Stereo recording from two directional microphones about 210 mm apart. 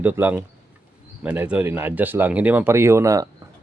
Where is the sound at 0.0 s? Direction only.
10° right (ahead or behind).